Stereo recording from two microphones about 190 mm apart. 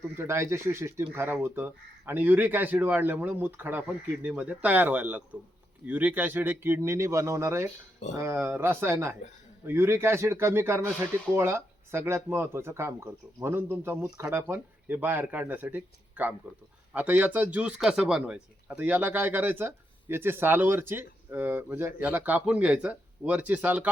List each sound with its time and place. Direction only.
0.2 s a man's voice: 15° right (ahead or behind)